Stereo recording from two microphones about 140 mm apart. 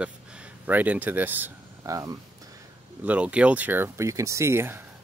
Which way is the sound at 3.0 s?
10° right (ahead or behind).